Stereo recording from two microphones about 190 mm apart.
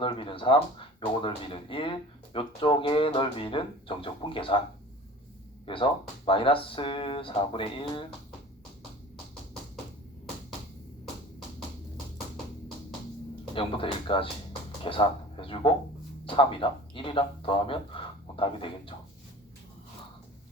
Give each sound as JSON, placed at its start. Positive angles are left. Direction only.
{"t": 0.0, "sound": "speech", "side_deg": 25}
{"t": 5.6, "sound": "speech", "side_deg": 25}
{"t": 13.5, "sound": "speech", "side_deg": 30}